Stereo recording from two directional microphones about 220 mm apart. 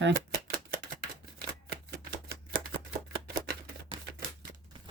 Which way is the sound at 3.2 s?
45° right (ahead or behind).